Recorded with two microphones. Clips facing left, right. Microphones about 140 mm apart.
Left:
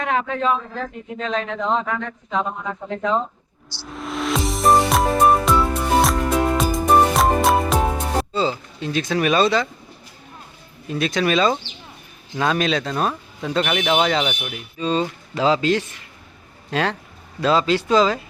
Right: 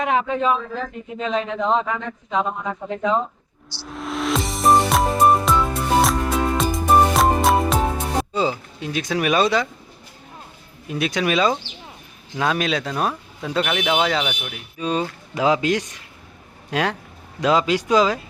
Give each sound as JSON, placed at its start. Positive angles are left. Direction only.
{"t": 0.0, "sound": "a man's voice", "side_deg": -15}
{"t": 3.8, "sound": "music", "side_deg": 0}
{"t": 8.3, "sound": "a man's voice", "side_deg": -15}
{"t": 10.8, "sound": "a man's voice", "side_deg": -10}